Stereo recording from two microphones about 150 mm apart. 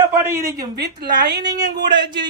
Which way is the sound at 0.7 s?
90° right.